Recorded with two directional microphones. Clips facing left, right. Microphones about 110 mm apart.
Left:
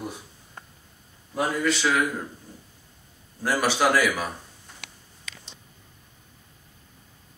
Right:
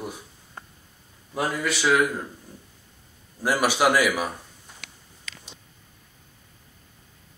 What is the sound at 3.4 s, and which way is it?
Speech, 15° right (ahead or behind).